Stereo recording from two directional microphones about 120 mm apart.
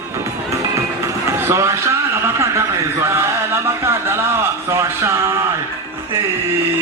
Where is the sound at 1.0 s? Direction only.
20° right (ahead or behind).